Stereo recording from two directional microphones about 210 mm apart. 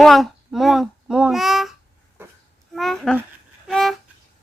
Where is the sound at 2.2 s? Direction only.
10° right (ahead or behind).